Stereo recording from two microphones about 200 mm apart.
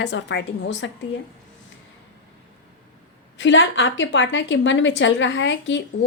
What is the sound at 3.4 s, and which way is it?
A woman's voice, 70° left (ahead or behind).